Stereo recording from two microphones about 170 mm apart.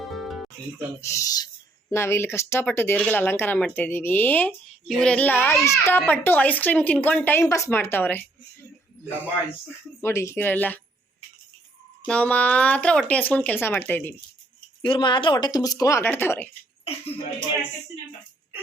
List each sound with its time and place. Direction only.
0.1 s music: centre (ahead or behind)
1.0 s speech: 20° left (ahead or behind)
10.0 s speech: 15° left (ahead or behind)
12.0 s speech: 10° left (ahead or behind)
14.8 s speech: 25° left (ahead or behind)